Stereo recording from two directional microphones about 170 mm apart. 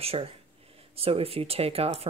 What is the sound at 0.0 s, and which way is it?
Speech, 35° right (ahead or behind).